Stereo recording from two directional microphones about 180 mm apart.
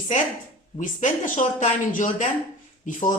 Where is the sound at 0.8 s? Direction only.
45° left (ahead or behind).